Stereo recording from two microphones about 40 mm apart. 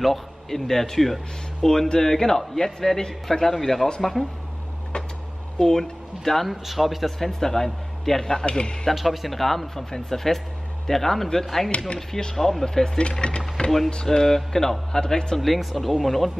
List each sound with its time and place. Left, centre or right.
0.0 s a man's voice: centre
5.6 s speech: centre
6.5 s a man's voice: centre
8.9 s a man's voice: centre
12.1 s speech: centre
12.4 s speech: centre; by 13.7 s left
14.0 s speech: centre
15.3 s a man's voice: centre